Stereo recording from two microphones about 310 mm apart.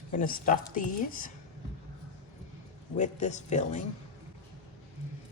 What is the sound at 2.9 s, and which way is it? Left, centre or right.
Speech, left.